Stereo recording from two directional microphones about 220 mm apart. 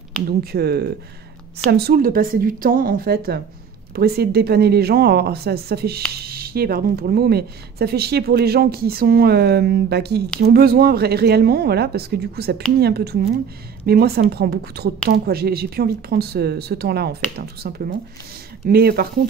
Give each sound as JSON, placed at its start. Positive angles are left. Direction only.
{"t": 0.3, "sound": "speech", "side_deg": -45}